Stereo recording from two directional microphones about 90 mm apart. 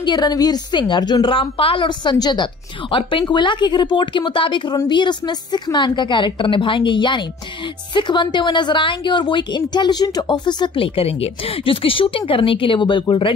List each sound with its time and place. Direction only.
0.0 s a woman's voice: 50° left (ahead or behind)
1.3 s speech: 85° left
1.9 s a woman's voice: 50° left (ahead or behind)
2.9 s a woman's voice: 75° left (ahead or behind)